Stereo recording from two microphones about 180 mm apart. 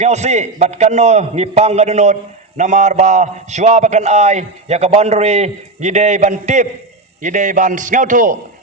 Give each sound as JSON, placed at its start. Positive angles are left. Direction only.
{"t": 0.0, "sound": "a man's voice", "side_deg": -40}